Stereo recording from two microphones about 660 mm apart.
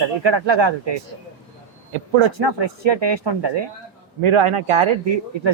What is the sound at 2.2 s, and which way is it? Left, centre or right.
Speech, right.